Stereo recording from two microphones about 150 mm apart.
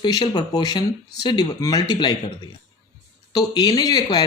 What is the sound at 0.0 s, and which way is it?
Speech, 30° left (ahead or behind).